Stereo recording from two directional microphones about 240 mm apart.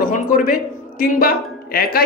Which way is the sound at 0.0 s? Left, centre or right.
Left.